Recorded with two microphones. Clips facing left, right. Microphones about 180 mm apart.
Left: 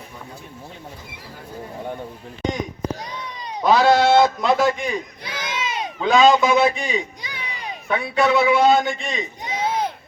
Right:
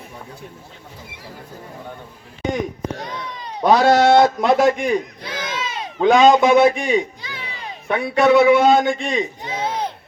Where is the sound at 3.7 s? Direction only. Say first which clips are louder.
Right 2 dB; 50° right (ahead or behind).